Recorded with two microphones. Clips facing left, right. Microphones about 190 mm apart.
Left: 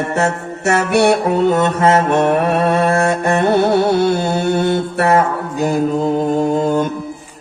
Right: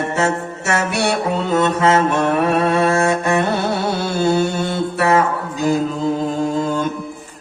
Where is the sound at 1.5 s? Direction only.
55° left (ahead or behind).